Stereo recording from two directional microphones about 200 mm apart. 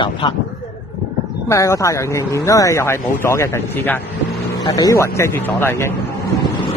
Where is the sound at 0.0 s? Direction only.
25° left (ahead or behind).